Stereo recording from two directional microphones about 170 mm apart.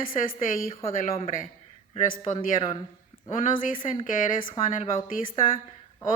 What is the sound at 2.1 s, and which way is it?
A woman's voice, 50° left (ahead or behind).